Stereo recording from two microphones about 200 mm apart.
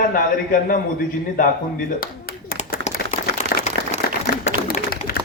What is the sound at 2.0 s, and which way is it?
Clapping, 45° left (ahead or behind).